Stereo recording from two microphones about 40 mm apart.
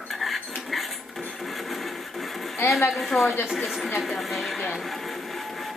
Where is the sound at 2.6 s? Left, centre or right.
Left.